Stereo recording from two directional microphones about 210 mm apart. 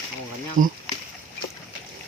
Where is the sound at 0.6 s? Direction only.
40° right (ahead or behind).